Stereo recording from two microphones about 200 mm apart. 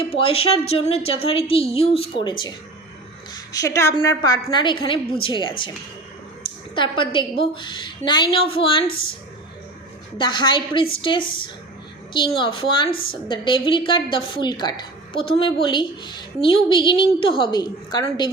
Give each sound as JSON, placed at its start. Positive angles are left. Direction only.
{"t": 0.1, "sound": "a woman's voice", "side_deg": 30}
{"t": 3.5, "sound": "a woman's voice", "side_deg": 15}
{"t": 10.2, "sound": "a woman's voice", "side_deg": 25}